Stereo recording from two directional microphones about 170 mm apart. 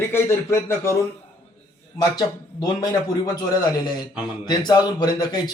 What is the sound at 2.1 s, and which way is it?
Speech, 25° left (ahead or behind).